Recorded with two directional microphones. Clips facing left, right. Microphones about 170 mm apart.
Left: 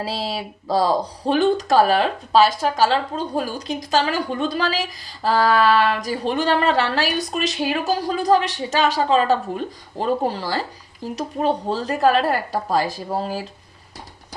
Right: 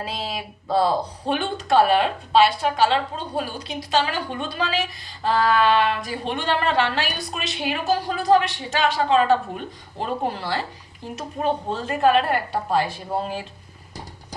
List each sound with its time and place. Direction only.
0.0 s speech: 35° left (ahead or behind)
11.1 s speech: 35° left (ahead or behind)